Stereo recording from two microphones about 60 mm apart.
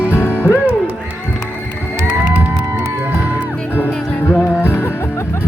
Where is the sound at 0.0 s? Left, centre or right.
Left.